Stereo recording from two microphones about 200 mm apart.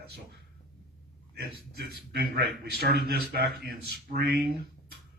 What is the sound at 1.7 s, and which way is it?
A man's voice, 55° right (ahead or behind).